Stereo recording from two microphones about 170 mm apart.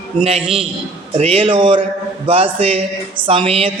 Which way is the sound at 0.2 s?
35° right (ahead or behind).